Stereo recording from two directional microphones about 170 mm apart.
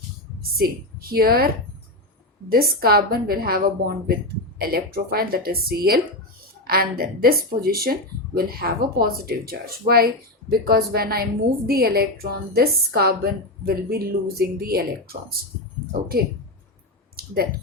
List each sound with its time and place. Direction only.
0.5 s a woman's voice: 65° right (ahead or behind)
2.5 s a woman's voice: 60° right (ahead or behind)